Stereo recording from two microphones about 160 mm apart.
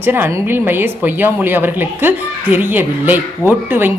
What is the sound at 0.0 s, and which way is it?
Speech, 15° right (ahead or behind).